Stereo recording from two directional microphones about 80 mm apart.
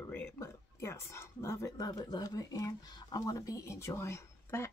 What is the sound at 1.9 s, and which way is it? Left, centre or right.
Speech, left.